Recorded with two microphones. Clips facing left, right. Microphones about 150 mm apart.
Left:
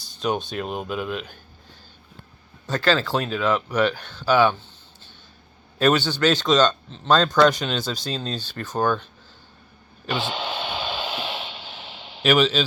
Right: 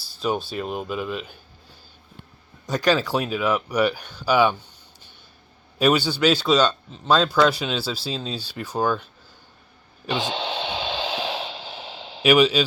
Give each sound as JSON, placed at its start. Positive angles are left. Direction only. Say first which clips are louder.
{"t": 0.0, "sound": "speech", "louder": "even", "side_deg": -5}
{"t": 2.6, "sound": "speech", "louder": "right 1 dB", "side_deg": -15}
{"t": 5.8, "sound": "speech", "louder": "even", "side_deg": -10}
{"t": 10.3, "sound": "a sound", "louder": "right 1 dB", "side_deg": -30}
{"t": 12.2, "sound": "speech", "louder": "right 2 dB", "side_deg": -10}